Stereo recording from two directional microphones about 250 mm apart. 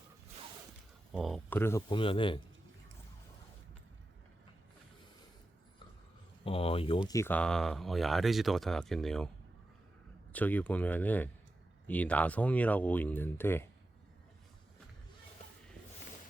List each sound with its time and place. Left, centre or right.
1.1 s speech: centre; by 2.4 s left
6.4 s speech: left
7.1 s speech: centre
10.3 s speech: centre